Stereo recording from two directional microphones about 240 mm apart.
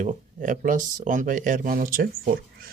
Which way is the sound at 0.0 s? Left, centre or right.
Right.